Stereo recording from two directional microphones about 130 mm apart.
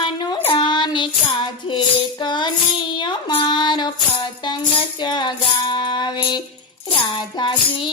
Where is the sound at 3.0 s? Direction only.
40° left (ahead or behind).